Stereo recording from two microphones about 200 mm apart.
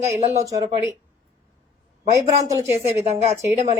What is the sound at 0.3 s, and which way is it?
Speech, 15° right (ahead or behind).